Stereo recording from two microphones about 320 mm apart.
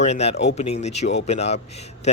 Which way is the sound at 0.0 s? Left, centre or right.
Centre.